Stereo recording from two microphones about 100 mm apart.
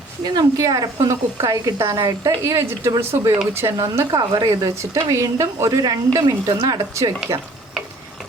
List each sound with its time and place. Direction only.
0.2 s speech: 45° right (ahead or behind); by 3.8 s 25° right (ahead or behind)
3.8 s speech: 35° right (ahead or behind)